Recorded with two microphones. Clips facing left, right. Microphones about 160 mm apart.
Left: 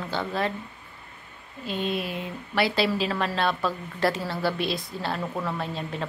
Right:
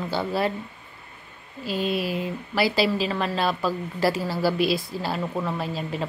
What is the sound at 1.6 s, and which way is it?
A woman's voice, 5° right (ahead or behind).